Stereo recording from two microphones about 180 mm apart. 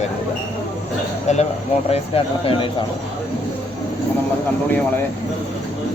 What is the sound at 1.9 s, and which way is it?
Speech, 30° left (ahead or behind).